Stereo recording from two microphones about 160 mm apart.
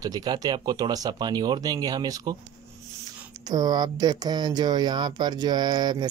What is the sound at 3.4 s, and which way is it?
Speech, 25° right (ahead or behind).